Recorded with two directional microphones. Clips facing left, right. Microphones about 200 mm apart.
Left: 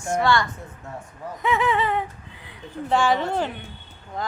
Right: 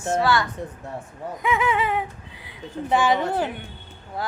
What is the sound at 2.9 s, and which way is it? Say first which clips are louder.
Speech: even; 15° right (ahead or behind).